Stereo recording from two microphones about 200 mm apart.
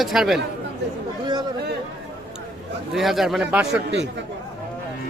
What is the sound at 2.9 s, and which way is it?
Speech, centre (ahead or behind).